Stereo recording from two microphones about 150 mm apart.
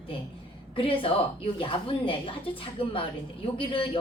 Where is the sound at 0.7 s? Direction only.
35° left (ahead or behind).